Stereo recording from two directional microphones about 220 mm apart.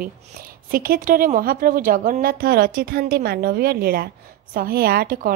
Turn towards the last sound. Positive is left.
turn(degrees=-45)  # may be behind; listen again after turning